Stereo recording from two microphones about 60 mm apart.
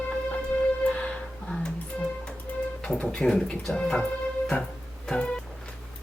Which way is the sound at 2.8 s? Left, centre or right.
Centre.